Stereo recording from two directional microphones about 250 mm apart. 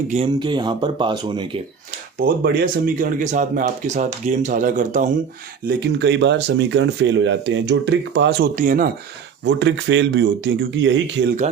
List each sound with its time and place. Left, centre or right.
0.1 s speech: right
2.1 s speech: right
5.6 s speech: right
9.4 s speech: right